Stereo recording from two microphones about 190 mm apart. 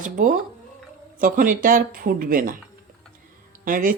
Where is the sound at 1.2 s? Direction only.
45° right (ahead or behind).